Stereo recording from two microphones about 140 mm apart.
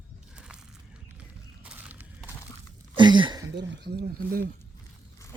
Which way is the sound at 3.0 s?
35° right (ahead or behind).